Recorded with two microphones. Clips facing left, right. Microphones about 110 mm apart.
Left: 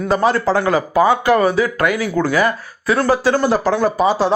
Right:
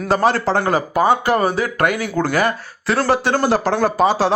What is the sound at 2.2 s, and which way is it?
A man's voice, 70° right (ahead or behind).